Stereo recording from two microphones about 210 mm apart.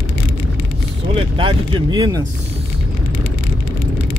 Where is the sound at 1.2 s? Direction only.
25° right (ahead or behind).